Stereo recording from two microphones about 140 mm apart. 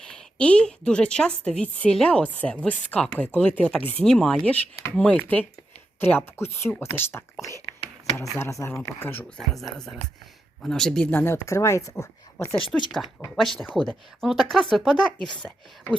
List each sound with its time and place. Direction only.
0.1 s a woman's voice: 10° left (ahead or behind)
8.4 s speech: 20° left (ahead or behind)
9.4 s speech: centre (ahead or behind)
11.1 s speech: 15° left (ahead or behind)
12.9 s speech: centre (ahead or behind)